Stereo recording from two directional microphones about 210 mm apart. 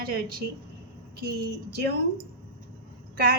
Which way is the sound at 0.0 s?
45° right (ahead or behind).